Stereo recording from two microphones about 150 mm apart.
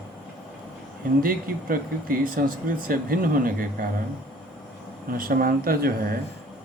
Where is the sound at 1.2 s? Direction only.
70° right (ahead or behind).